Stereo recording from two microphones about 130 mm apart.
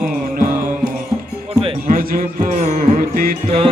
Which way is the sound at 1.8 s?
90° right.